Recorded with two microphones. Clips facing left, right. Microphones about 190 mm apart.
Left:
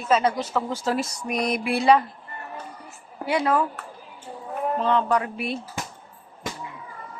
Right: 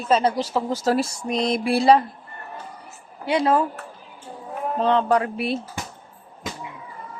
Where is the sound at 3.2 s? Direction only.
25° right (ahead or behind).